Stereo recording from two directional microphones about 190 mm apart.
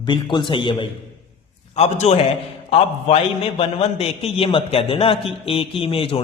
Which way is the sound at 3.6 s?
30° left (ahead or behind).